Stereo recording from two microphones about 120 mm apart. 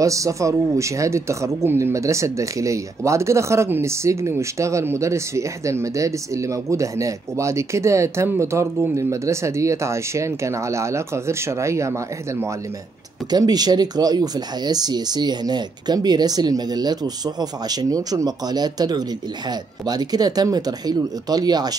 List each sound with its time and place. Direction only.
0.0 s speech: 25° right (ahead or behind)
13.3 s speech: 35° right (ahead or behind)